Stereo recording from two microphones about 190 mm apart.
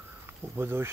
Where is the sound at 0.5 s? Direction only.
15° right (ahead or behind).